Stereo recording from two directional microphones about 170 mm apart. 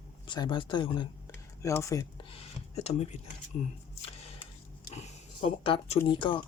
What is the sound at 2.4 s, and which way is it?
Speech, 40° left (ahead or behind).